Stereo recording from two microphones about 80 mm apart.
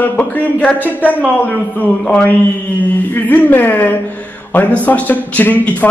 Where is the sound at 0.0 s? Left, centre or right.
Left.